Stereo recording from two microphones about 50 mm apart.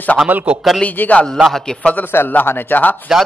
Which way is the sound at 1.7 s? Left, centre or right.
Centre.